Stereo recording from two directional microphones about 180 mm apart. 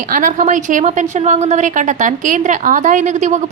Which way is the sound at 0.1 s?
45° right (ahead or behind).